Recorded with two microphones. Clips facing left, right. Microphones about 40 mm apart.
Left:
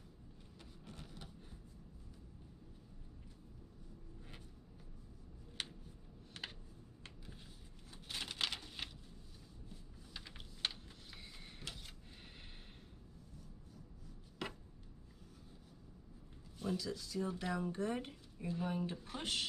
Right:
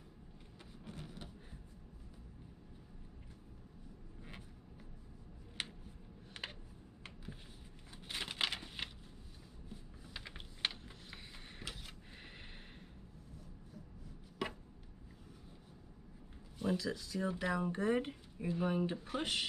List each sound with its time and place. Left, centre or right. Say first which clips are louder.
0.6 s vehicle: right 4 dB; centre
4.2 s vehicle: right 6 dB; centre
5.6 s a sound: right 2 dB; centre
7.9 s a sound: right 2 dB; centre
9.7 s typing: right 7 dB; centre
16.5 s speech: right 4 dB; centre